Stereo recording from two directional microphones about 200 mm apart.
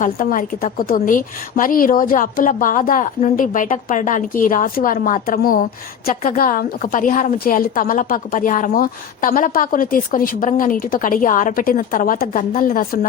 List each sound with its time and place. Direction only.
0.0 s a woman's voice: 40° left (ahead or behind)